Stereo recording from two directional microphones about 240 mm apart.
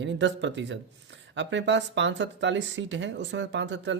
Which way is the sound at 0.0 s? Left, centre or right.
Right.